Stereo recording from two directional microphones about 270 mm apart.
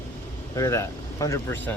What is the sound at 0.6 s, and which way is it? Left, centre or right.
Speech, centre.